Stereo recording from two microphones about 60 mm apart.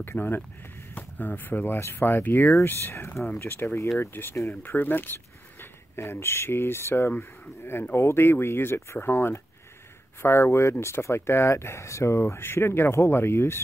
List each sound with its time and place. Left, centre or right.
0.0 s speech: left